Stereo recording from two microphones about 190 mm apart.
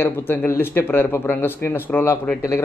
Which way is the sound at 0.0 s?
10° left (ahead or behind).